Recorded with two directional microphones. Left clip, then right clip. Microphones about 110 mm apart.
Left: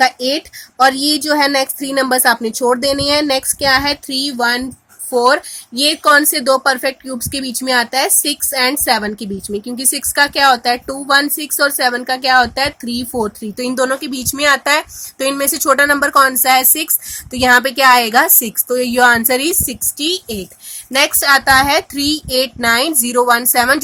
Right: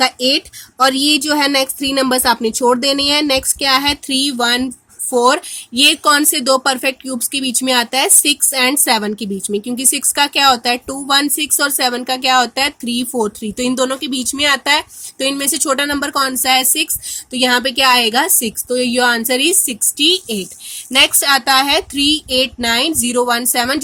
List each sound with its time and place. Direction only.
0.0 s a woman's voice: 25° right (ahead or behind); by 4.7 s 45° right (ahead or behind)
5.8 s a woman's voice: 40° right (ahead or behind)
12.8 s speech: 20° left (ahead or behind)
13.1 s speech: 45° right (ahead or behind)
21.1 s speech: 30° right (ahead or behind)